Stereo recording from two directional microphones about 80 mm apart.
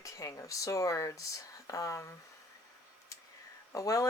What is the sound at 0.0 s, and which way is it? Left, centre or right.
Speech, left.